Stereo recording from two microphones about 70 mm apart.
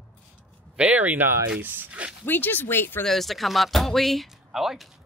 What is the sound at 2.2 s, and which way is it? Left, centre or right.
Speech, left.